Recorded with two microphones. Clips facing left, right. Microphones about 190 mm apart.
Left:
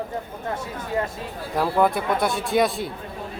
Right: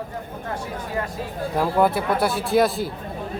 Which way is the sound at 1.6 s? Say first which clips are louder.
Right 1 dB; 5° right (ahead or behind).